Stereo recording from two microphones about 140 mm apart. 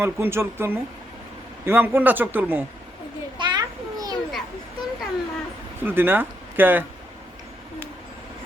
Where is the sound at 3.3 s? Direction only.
35° right (ahead or behind).